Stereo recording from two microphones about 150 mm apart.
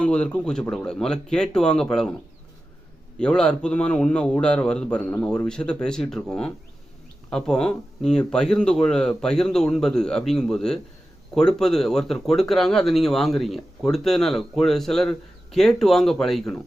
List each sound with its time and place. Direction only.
0.0 s speech: 5° left (ahead or behind)
3.2 s speech: 5° left (ahead or behind)